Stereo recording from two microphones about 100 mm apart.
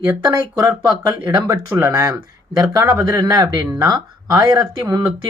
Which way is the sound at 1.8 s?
30° right (ahead or behind).